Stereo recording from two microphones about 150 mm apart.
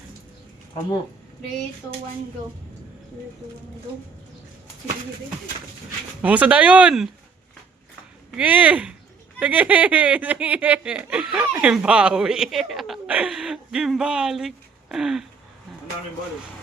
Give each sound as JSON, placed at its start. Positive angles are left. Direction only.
{"t": 6.2, "sound": "speech", "side_deg": -10}
{"t": 8.4, "sound": "speech", "side_deg": -10}